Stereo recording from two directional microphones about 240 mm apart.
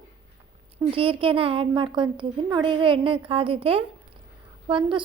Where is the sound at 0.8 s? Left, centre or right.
Right.